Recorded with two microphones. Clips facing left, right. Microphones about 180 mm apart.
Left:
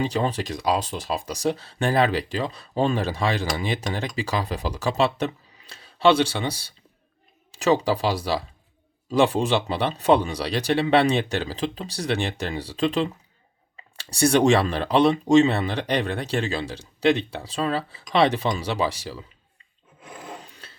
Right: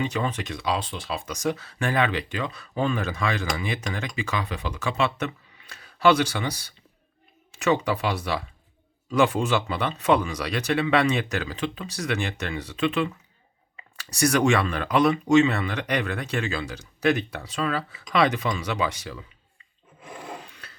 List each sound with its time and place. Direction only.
0.0 s speech: 35° left (ahead or behind)
20.4 s dog: 30° left (ahead or behind)